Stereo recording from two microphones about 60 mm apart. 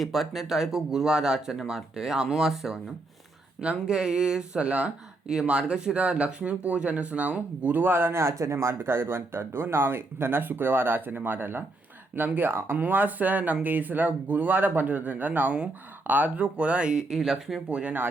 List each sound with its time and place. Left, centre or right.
0.0 s speech: centre
17.7 s speech: right